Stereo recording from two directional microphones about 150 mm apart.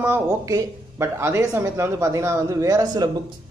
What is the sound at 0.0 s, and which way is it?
Speech, 15° right (ahead or behind).